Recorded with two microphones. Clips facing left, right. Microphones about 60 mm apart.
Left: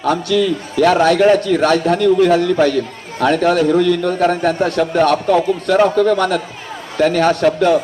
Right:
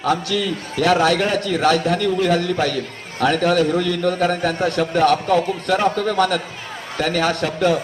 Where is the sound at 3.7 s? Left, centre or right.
Left.